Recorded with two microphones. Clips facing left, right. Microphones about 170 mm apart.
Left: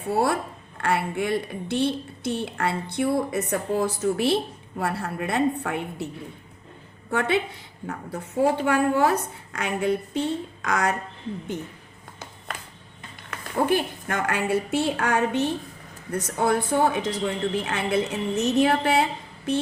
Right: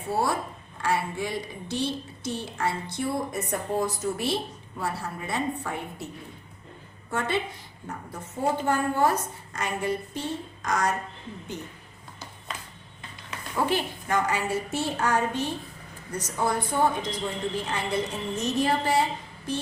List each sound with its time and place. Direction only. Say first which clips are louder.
0.8 s a woman's voice: left 3 dB; 60° left (ahead or behind)
7.1 s a woman's voice: left 4 dB; 65° left (ahead or behind)
13.3 s a woman's voice: left 4 dB; 50° left (ahead or behind)